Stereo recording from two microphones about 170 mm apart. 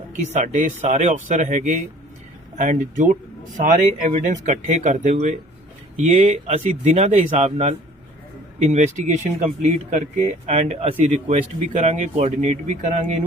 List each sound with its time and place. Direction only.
0.3 s speech: 45° right (ahead or behind)